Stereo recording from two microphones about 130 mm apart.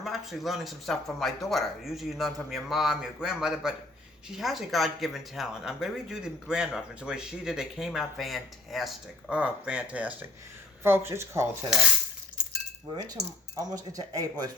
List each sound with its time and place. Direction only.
0.0 s speech: centre (ahead or behind); by 11.4 s 20° right (ahead or behind)
13.6 s speech: 25° right (ahead or behind)